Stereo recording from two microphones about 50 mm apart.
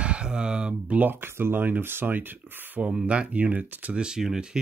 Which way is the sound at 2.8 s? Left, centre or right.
Right.